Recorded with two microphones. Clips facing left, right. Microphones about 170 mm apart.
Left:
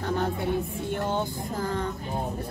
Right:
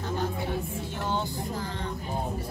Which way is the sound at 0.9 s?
50° left (ahead or behind).